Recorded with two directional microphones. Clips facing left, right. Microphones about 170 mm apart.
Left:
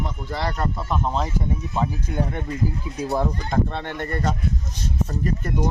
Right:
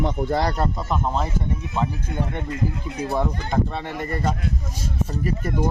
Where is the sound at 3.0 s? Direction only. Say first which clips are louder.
Even; centre (ahead or behind).